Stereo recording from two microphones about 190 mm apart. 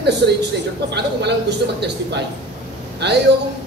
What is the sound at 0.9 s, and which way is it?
A man's voice, 60° right (ahead or behind).